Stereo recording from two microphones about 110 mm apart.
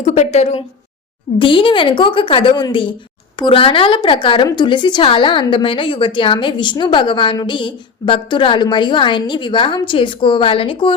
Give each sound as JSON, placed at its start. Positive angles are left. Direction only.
{"t": 0.0, "sound": "speech", "side_deg": 90}
{"t": 1.4, "sound": "a woman's voice", "side_deg": 50}